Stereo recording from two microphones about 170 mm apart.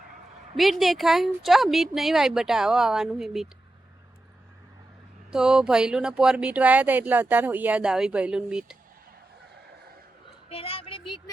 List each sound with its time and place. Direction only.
0.5 s a woman's voice: centre (ahead or behind)
5.3 s speech: 5° right (ahead or behind)
10.5 s speech: 35° left (ahead or behind)